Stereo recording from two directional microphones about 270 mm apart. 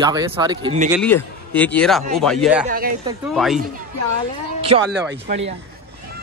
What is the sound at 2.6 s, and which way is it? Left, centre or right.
Speech, right.